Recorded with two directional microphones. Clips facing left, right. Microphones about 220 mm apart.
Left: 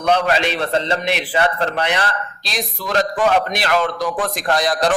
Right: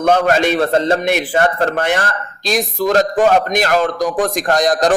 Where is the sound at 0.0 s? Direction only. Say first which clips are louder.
Right 4 dB; 45° right (ahead or behind).